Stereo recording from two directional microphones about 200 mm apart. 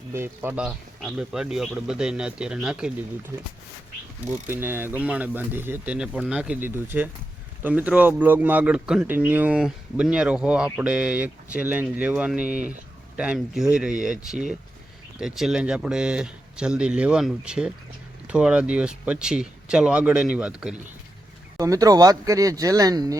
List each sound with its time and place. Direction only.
0.1 s speech: 10° right (ahead or behind)
4.4 s speech: 10° right (ahead or behind)
12.5 s speech: 40° right (ahead or behind)
13.1 s speech: 5° right (ahead or behind)
15.2 s speech: centre (ahead or behind)
21.6 s speech: 15° right (ahead or behind)